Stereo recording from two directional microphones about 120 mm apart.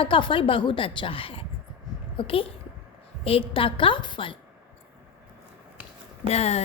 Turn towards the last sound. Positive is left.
turn(degrees=60)  # may be behind; listen again after turning